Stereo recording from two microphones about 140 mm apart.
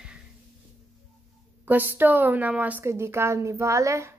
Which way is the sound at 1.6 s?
15° right (ahead or behind).